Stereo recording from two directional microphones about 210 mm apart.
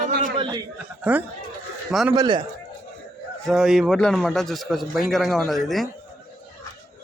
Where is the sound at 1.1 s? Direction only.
5° right (ahead or behind).